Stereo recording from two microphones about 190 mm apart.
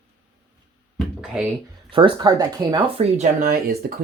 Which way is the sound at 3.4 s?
50° right (ahead or behind).